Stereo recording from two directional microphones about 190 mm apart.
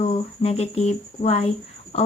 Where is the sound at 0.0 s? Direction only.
35° left (ahead or behind).